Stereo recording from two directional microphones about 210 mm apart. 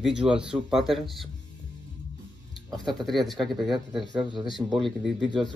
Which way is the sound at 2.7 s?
Centre (ahead or behind).